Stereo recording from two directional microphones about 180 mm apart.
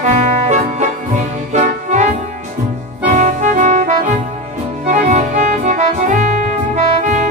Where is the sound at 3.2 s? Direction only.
40° right (ahead or behind).